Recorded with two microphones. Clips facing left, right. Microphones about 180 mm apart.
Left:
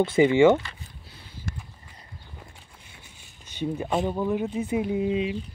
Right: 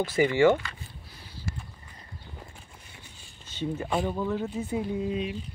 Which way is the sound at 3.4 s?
15° left (ahead or behind).